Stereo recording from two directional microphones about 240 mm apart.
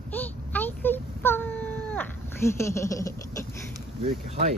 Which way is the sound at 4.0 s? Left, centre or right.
Right.